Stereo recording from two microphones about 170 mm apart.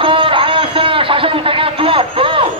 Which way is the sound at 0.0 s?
30° right (ahead or behind).